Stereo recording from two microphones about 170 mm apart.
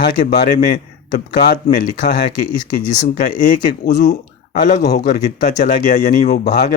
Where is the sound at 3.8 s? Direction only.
70° left (ahead or behind); by 6.4 s 50° left (ahead or behind).